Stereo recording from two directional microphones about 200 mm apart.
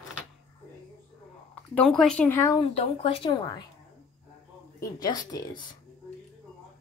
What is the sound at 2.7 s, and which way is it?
Speech, 30° left (ahead or behind).